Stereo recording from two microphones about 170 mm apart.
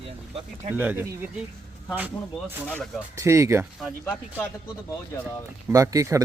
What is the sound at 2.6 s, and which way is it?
Speech, centre (ahead or behind).